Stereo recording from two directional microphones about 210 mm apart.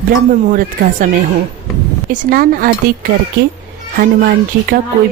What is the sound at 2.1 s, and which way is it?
Speech, 40° right (ahead or behind).